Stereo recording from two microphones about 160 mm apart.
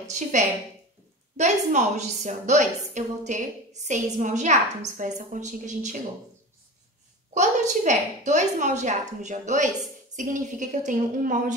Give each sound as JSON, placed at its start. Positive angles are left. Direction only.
{"t": 0.1, "sound": "a woman's voice", "side_deg": -50}
{"t": 7.3, "sound": "a woman's voice", "side_deg": -50}